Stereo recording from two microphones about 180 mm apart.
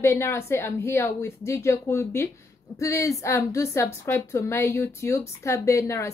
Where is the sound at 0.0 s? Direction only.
15° left (ahead or behind).